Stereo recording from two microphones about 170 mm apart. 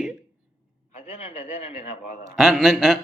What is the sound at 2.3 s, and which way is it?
Speech, centre (ahead or behind).